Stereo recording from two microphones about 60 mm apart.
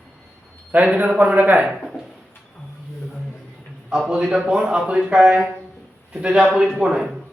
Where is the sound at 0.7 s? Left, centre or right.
Right.